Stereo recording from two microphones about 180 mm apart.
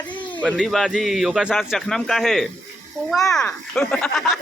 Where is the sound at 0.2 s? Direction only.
25° left (ahead or behind).